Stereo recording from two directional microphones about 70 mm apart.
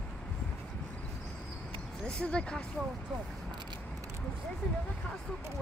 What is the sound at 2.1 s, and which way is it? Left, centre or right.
Speech, centre.